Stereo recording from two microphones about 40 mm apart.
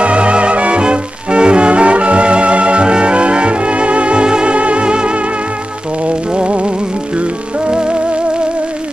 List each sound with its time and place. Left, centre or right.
0.0 s music: right